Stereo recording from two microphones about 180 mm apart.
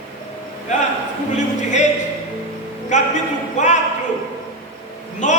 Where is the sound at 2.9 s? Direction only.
40° left (ahead or behind).